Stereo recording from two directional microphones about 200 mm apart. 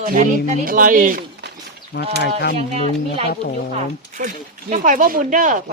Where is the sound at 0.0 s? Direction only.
40° right (ahead or behind).